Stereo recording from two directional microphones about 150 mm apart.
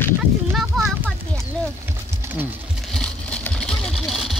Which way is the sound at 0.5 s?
Centre (ahead or behind).